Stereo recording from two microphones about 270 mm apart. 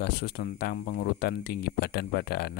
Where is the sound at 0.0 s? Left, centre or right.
Left.